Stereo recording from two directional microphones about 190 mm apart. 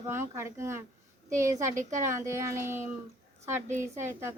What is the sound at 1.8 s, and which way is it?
Speech, 40° right (ahead or behind).